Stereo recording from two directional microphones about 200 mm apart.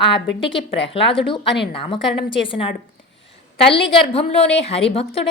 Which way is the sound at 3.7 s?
25° left (ahead or behind).